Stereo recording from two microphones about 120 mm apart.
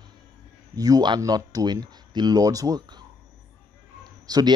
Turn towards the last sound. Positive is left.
turn(degrees=-35)  # may be behind; listen again after turning